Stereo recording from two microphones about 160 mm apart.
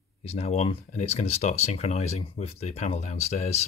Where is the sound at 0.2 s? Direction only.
40° left (ahead or behind).